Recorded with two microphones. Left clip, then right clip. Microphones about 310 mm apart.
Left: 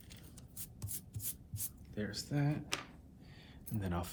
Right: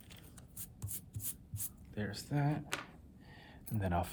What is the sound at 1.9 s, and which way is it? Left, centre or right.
Speech, right.